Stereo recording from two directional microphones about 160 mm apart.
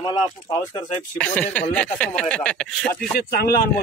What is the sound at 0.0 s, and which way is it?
Speech, 25° left (ahead or behind).